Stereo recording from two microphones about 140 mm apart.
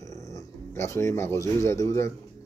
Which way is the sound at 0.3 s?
20° left (ahead or behind).